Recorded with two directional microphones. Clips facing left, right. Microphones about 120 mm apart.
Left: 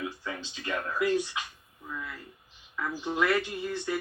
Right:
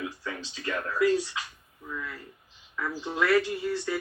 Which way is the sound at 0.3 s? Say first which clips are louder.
Right 1 dB; 15° left (ahead or behind).